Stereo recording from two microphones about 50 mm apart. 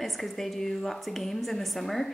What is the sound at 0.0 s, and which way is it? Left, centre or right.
Speech, centre.